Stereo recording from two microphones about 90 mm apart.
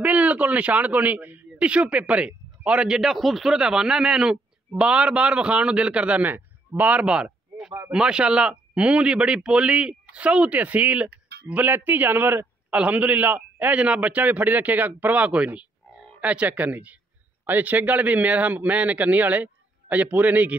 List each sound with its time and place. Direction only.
0.0 s speech: 15° right (ahead or behind)